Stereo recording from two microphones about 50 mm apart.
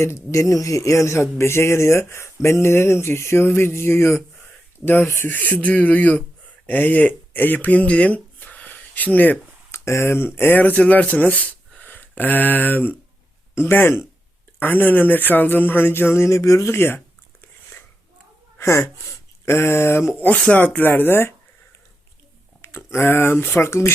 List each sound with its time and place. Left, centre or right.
0.0 s a man's voice: left
5.3 s speech: left
9.7 s a man's voice: left
10.6 s speech: left
13.6 s speech: left
14.6 s speech: left
17.4 s a sound: left
18.6 s speech: left
20.3 s speech: left
20.6 s speech: left
22.6 s a sound: left
23.0 s speech: left